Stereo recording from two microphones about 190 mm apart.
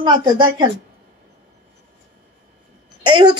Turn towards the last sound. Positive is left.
turn(degrees=-25)  # may be behind; listen again after turning